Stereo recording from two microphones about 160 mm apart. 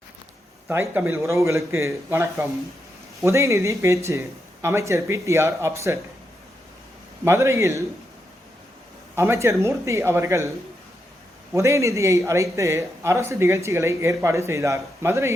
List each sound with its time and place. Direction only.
0.7 s speech: 15° right (ahead or behind)
7.3 s speech: 15° right (ahead or behind)
9.1 s speech: 15° right (ahead or behind)
11.5 s speech: 20° right (ahead or behind)